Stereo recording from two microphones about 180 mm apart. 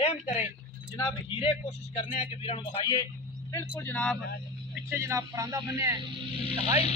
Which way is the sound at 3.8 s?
5° left (ahead or behind).